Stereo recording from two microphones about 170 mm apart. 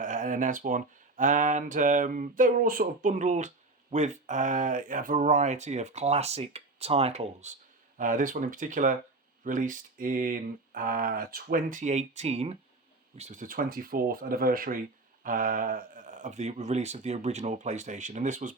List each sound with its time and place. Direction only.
0.0 s speech: 50° right (ahead or behind)
7.9 s speech: 50° right (ahead or behind)